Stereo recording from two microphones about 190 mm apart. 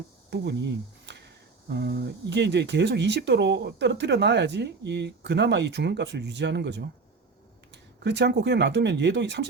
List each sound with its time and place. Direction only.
0.3 s speech: 65° right (ahead or behind)